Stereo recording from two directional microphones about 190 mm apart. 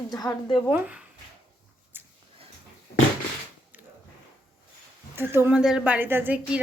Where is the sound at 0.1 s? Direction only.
20° left (ahead or behind).